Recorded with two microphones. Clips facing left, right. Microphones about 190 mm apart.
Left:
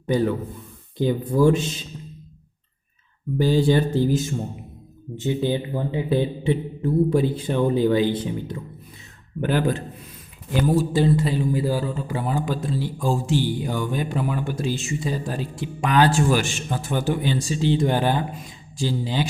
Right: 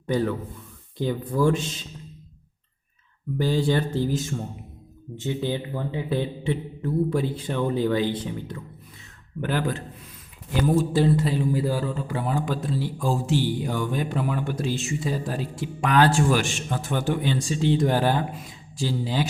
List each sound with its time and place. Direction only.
0.1 s speech: 10° left (ahead or behind)
3.3 s speech: 10° left (ahead or behind)
9.4 s a man's voice: 20° left (ahead or behind)
10.7 s speech: centre (ahead or behind)